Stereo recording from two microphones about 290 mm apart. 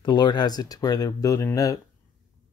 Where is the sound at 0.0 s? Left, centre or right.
Centre.